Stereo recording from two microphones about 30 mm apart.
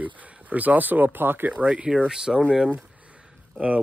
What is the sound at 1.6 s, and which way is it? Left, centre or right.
Speech, right.